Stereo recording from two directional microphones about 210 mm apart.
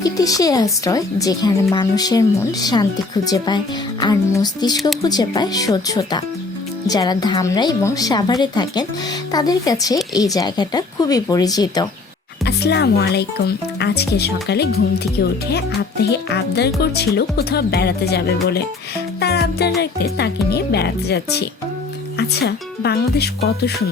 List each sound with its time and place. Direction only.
0.0 s a woman's voice: 15° left (ahead or behind)
12.5 s speech: 50° left (ahead or behind)